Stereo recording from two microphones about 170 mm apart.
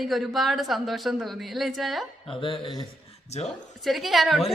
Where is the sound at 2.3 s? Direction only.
30° left (ahead or behind).